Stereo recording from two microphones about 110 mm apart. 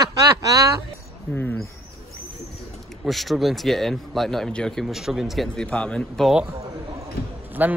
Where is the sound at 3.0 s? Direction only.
Centre (ahead or behind).